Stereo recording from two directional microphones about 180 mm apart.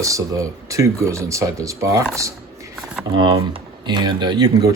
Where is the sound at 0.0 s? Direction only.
20° right (ahead or behind).